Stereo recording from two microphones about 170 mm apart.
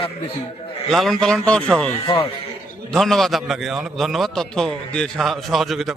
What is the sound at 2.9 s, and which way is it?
A man's voice, centre (ahead or behind).